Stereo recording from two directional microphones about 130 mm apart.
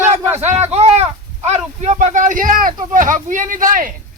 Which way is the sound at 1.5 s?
60° right (ahead or behind).